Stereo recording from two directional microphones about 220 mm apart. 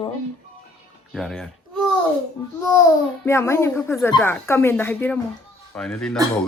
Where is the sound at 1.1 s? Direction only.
Centre (ahead or behind).